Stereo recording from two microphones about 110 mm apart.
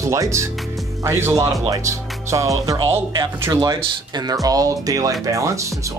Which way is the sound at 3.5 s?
35° right (ahead or behind).